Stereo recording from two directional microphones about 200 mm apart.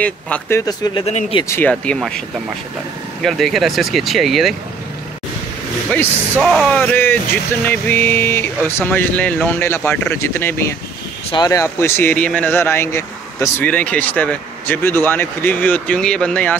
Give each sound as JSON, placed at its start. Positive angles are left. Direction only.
{"t": 0.0, "sound": "a man's voice", "side_deg": 10}
{"t": 1.0, "sound": "speech", "side_deg": 30}
{"t": 1.5, "sound": "speech", "side_deg": 5}
{"t": 6.4, "sound": "a man's voice", "side_deg": 0}